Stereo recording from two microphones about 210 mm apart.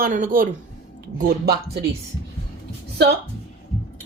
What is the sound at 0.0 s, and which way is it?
Speech, 40° right (ahead or behind).